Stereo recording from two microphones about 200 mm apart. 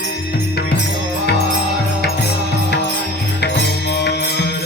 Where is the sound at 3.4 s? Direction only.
55° left (ahead or behind).